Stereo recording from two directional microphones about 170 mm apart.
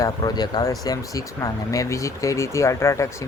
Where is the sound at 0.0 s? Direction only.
20° left (ahead or behind).